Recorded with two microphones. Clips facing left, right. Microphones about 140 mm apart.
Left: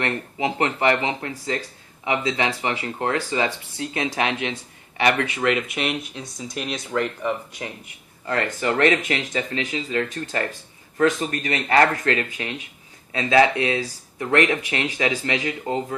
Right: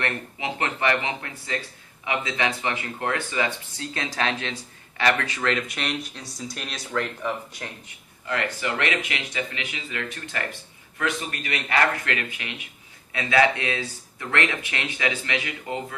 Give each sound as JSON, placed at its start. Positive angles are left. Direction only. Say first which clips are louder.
{"t": 0.0, "sound": "speech", "louder": "left 5 dB", "side_deg": 25}
{"t": 8.3, "sound": "speech", "louder": "left 4 dB", "side_deg": 40}